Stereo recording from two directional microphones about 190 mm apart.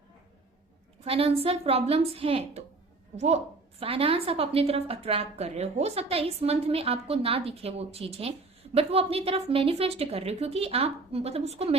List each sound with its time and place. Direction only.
1.0 s a woman's voice: 30° right (ahead or behind)
3.8 s a woman's voice: 30° right (ahead or behind)